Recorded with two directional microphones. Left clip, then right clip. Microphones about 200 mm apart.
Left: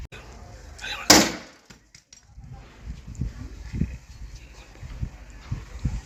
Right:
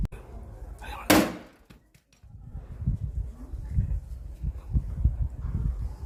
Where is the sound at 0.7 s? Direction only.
40° right (ahead or behind).